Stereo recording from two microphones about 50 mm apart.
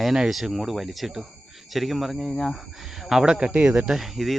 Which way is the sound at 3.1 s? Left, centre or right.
Centre.